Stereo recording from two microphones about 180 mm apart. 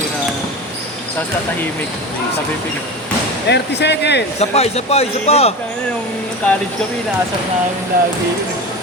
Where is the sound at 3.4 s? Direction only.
70° left (ahead or behind).